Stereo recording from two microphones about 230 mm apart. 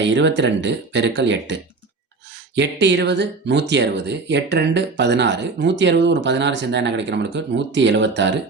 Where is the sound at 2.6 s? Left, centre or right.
Right.